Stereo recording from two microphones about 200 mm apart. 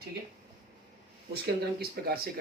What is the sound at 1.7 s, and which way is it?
Speech, 50° right (ahead or behind).